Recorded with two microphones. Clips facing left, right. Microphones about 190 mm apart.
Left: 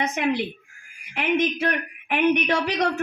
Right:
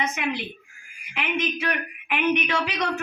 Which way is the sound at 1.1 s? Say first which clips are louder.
Left 5 dB; 45° left (ahead or behind).